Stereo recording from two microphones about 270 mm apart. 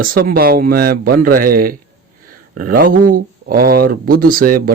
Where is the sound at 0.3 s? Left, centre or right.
Right.